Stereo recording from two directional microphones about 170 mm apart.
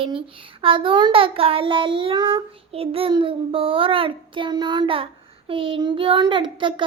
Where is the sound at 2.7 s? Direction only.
35° right (ahead or behind).